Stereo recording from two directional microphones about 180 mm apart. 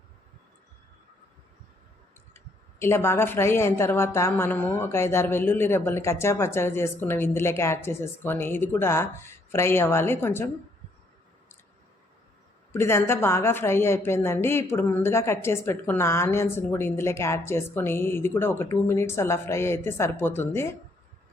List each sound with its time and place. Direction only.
2.3 s speech: 15° left (ahead or behind)
12.7 s speech: 15° left (ahead or behind)